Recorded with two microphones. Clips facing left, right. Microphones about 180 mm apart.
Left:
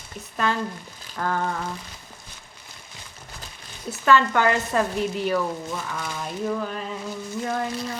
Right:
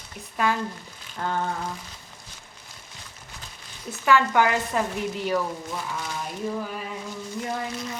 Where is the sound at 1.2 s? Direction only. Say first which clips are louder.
Left 2 dB; 55° left (ahead or behind).